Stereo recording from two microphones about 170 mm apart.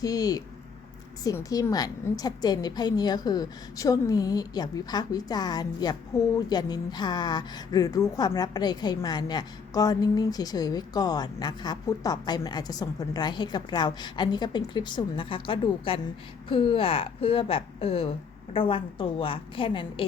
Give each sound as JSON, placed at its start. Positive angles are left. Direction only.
{"t": 0.0, "sound": "a woman's voice", "side_deg": 20}